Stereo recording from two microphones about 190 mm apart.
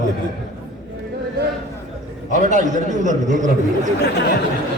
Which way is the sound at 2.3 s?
40° right (ahead or behind).